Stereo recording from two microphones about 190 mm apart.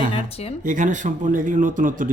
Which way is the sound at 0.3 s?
30° left (ahead or behind).